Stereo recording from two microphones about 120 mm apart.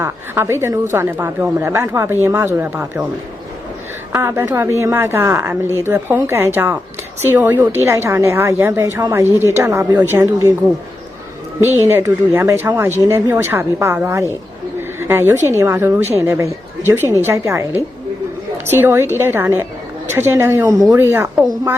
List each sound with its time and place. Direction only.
0.0 s speech: 20° right (ahead or behind)
4.1 s a woman's voice: 20° right (ahead or behind)
11.6 s speech: 20° right (ahead or behind)
14.8 s a sound: 20° right (ahead or behind)
15.5 s a woman's voice: 20° right (ahead or behind)